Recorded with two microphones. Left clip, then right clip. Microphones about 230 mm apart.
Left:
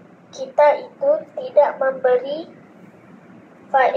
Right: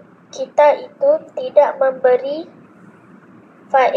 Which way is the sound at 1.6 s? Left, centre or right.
Right.